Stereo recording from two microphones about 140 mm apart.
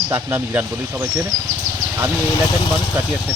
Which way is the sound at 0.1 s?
15° right (ahead or behind).